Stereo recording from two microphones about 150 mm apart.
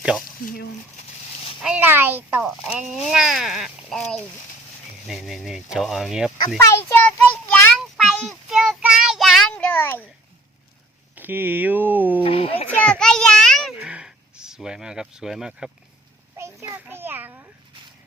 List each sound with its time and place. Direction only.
0.4 s speech: 90° left
1.6 s speech: 10° right (ahead or behind)
6.7 s a child's voice: 15° left (ahead or behind)
7.7 s child singing: centre (ahead or behind)
9.6 s a child's voice: 10° left (ahead or behind)
11.1 s speech: 10° right (ahead or behind)
12.2 s a child's voice: 40° left (ahead or behind)
12.7 s children playing: 5° left (ahead or behind)
13.7 s a sound: 5° right (ahead or behind)
16.6 s speech: 10° right (ahead or behind)